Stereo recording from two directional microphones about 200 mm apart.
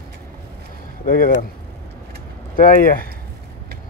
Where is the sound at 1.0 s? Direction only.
45° left (ahead or behind).